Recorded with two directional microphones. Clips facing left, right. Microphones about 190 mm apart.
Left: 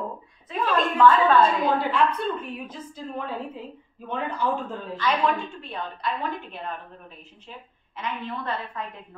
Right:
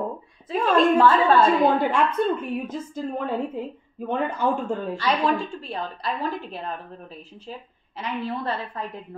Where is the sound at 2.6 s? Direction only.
45° right (ahead or behind).